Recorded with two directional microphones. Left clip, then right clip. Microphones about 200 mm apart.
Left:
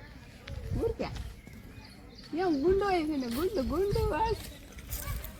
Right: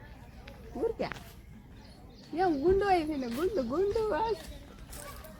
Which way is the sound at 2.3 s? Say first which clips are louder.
Right 1 dB; 30° left (ahead or behind).